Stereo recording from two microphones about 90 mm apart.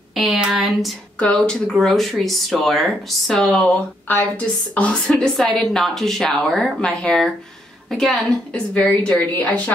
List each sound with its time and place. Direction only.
0.1 s speech: centre (ahead or behind)
1.2 s speech: 10° left (ahead or behind)
4.7 s a woman's voice: 15° left (ahead or behind)
5.0 s speech: 5° left (ahead or behind)
8.7 s a woman's voice: 15° left (ahead or behind)